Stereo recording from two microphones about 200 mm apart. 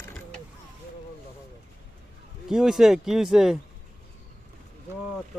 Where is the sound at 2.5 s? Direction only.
Centre (ahead or behind).